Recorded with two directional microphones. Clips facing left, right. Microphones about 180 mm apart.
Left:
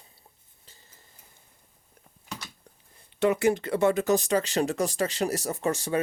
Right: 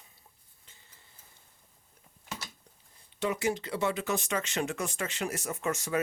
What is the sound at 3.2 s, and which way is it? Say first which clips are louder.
Speech: left 7 dB; 60° left (ahead or behind).